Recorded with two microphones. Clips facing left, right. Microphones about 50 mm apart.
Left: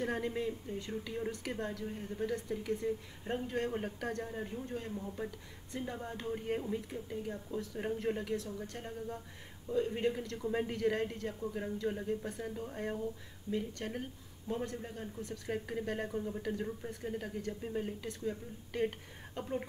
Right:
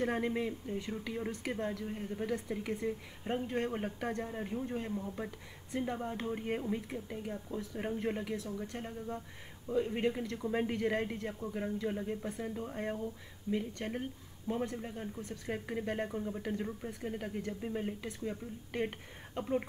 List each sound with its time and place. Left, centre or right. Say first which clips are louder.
0.0 s a woman's voice: right 2 dB; centre
7.2 s speech: even; centre